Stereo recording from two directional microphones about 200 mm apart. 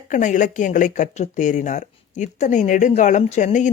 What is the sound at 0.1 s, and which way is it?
Speech, 40° left (ahead or behind).